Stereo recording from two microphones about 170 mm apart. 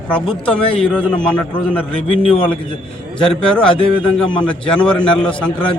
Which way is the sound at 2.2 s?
30° left (ahead or behind).